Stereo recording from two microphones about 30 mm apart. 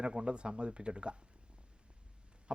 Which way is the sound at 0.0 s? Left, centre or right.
Right.